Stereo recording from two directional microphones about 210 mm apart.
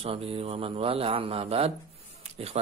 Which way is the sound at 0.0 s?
25° right (ahead or behind).